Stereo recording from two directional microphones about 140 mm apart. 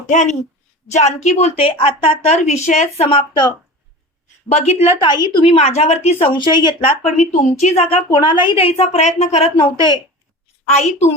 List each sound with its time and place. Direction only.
0.1 s a woman's voice: 60° left (ahead or behind); by 2.3 s 40° left (ahead or behind)
2.6 s a woman's voice: 50° left (ahead or behind); by 3.5 s 35° left (ahead or behind)
4.4 s a woman's voice: 50° left (ahead or behind)
4.9 s a woman's voice: 30° left (ahead or behind)
7.2 s a woman's voice: 55° left (ahead or behind)
8.1 s a woman's voice: 35° left (ahead or behind); by 9.5 s 50° left (ahead or behind)
9.6 s a woman's voice: 35° left (ahead or behind)
10.7 s a woman's voice: 55° left (ahead or behind)